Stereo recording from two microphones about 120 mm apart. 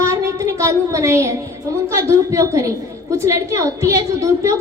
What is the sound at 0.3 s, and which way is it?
A woman's voice, 25° right (ahead or behind).